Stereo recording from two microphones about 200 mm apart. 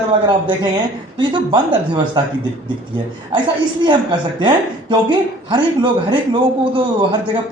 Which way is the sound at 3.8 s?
25° right (ahead or behind).